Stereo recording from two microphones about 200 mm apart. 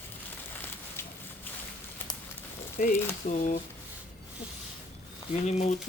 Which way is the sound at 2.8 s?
40° left (ahead or behind).